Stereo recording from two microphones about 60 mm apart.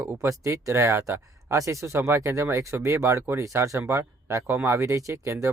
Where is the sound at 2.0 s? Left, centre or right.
Right.